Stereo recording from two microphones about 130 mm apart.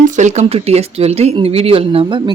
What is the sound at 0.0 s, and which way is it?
Speech, 70° right (ahead or behind).